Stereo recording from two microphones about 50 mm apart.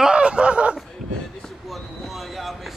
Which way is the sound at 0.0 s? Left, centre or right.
Centre.